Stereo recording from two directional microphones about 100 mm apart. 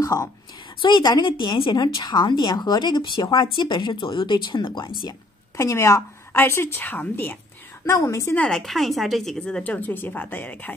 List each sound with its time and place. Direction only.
0.0 s a woman's voice: 35° left (ahead or behind)
0.7 s speech: 50° left (ahead or behind)
1.3 s speech: 55° left (ahead or behind)
5.6 s a woman's voice: 30° left (ahead or behind)
7.8 s a woman's voice: 30° left (ahead or behind)
8.4 s speech: 5° left (ahead or behind)